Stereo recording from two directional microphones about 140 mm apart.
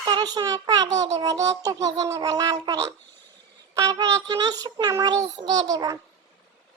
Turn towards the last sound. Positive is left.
turn(degrees=-25)  # may be behind; listen again after turning